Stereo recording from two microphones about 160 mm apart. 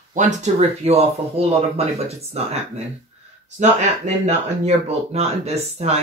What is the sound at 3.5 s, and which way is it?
Speech, 45° right (ahead or behind).